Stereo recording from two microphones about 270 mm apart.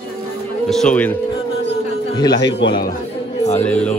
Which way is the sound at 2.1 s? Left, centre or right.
Centre.